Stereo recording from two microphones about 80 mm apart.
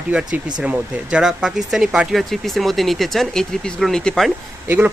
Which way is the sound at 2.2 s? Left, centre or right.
Centre.